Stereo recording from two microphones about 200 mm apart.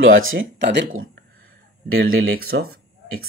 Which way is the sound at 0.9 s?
45° right (ahead or behind).